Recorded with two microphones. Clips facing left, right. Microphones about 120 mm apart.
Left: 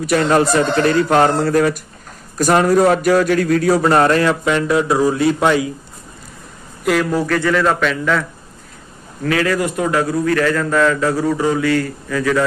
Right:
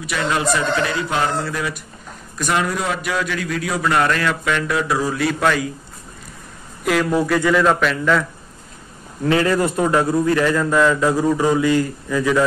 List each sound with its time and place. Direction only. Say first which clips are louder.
0.0 s a man's voice: left 7 dB; 45° left (ahead or behind); by 5.7 s 25° left (ahead or behind)
6.8 s speech: left 2 dB; centre (ahead or behind)
7.2 s a man's voice: even; 10° right (ahead or behind)
9.2 s a man's voice: even; 25° right (ahead or behind)